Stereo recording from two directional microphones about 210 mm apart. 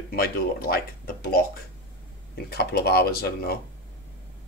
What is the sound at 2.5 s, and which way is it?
Speech, 50° left (ahead or behind).